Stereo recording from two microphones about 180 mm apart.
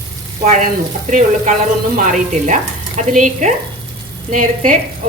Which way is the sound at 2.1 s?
45° right (ahead or behind).